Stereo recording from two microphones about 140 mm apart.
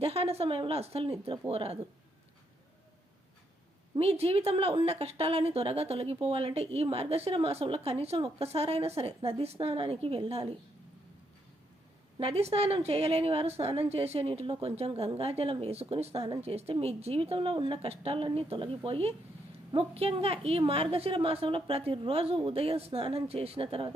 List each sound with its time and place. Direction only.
0.0 s a woman's voice: 45° right (ahead or behind)
3.9 s a woman's voice: 45° right (ahead or behind)
12.2 s a woman's voice: 45° right (ahead or behind)